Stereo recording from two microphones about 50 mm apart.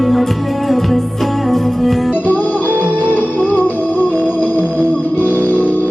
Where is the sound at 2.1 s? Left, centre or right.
Left.